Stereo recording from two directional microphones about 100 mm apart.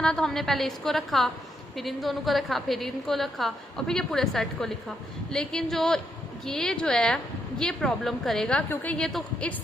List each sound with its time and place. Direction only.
0.0 s a woman's voice: 5° left (ahead or behind)
9.0 s a woman's voice: 5° left (ahead or behind)